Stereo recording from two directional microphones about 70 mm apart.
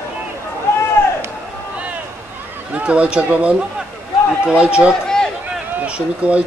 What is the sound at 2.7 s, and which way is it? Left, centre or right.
A man's voice, centre.